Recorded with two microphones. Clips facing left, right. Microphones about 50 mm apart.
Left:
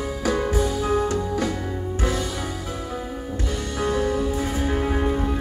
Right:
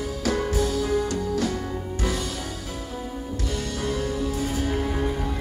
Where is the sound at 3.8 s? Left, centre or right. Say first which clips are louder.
Left 6 dB; left.